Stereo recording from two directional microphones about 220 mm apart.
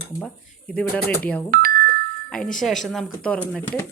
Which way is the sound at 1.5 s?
40° right (ahead or behind).